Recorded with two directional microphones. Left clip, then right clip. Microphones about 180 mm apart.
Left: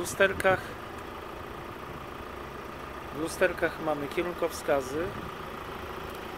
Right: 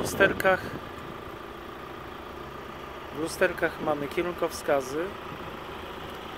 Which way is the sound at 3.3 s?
30° right (ahead or behind).